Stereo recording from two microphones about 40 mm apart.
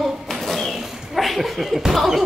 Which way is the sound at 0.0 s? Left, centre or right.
Centre.